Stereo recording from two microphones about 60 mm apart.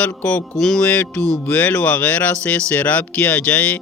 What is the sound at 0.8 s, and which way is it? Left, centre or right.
Speech, left.